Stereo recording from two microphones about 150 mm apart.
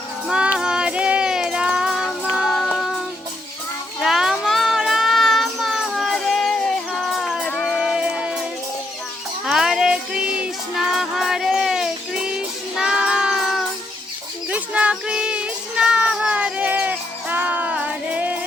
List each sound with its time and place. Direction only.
0.3 s music: 5° right (ahead or behind)
4.0 s child singing: centre (ahead or behind)
7.6 s music: centre (ahead or behind)
9.5 s music: 5° right (ahead or behind)
14.5 s child singing: 10° right (ahead or behind)